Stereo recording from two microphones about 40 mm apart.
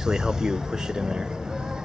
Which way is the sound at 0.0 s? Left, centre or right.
Centre.